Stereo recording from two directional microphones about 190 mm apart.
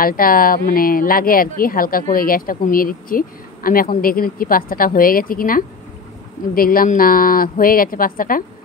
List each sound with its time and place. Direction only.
0.0 s speech: 50° left (ahead or behind)